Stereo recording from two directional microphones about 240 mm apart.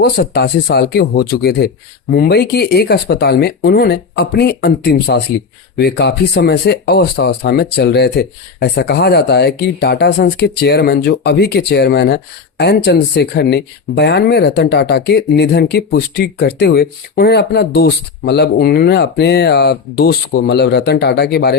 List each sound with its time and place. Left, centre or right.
0.0 s speech: left